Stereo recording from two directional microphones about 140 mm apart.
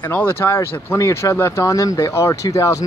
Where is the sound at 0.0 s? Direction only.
15° left (ahead or behind).